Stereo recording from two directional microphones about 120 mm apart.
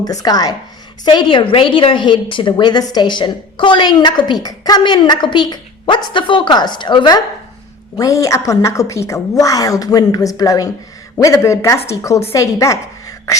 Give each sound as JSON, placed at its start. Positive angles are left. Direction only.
{"t": 0.0, "sound": "a woman's voice", "side_deg": 30}